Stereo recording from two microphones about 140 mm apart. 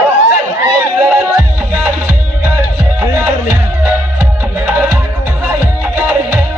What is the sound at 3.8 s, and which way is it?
Music, 15° right (ahead or behind).